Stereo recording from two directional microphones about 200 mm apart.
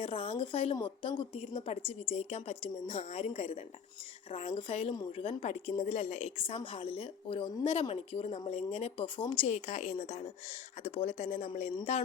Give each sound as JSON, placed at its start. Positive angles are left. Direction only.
{"t": 0.0, "sound": "a woman's voice", "side_deg": 30}